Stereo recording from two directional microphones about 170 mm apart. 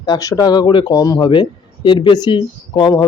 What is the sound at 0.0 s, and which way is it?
Speech, 20° left (ahead or behind).